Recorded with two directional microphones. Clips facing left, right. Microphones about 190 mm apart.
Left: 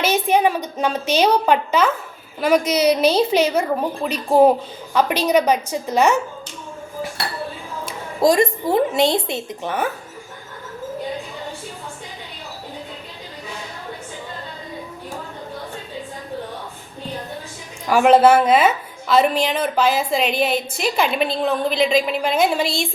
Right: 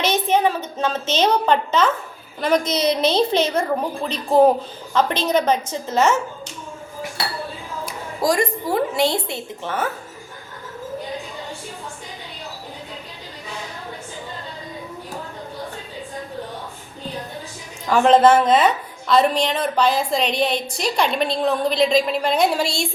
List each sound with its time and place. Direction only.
0.0 s a woman's voice: 10° left (ahead or behind)
7.9 s a woman's voice: 25° left (ahead or behind)
17.8 s a woman's voice: 10° left (ahead or behind)